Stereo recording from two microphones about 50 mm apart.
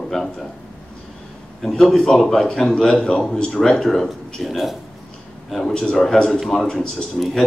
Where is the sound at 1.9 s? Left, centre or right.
Centre.